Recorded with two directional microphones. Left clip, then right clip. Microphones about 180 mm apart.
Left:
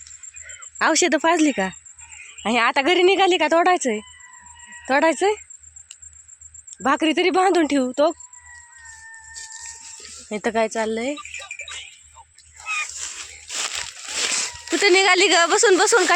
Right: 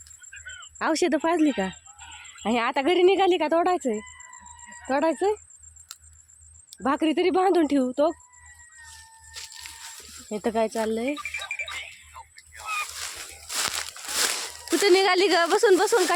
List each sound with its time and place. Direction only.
0.8 s speech: 5° right (ahead or behind)
6.8 s speech: centre (ahead or behind)
10.2 s speech: centre (ahead or behind)
12.1 s music: 5° right (ahead or behind)
12.6 s a sound: 65° right (ahead or behind)
13.6 s a sound: 15° left (ahead or behind)
14.8 s speech: 10° right (ahead or behind)